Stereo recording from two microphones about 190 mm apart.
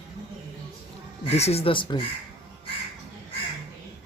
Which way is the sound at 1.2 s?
35° left (ahead or behind).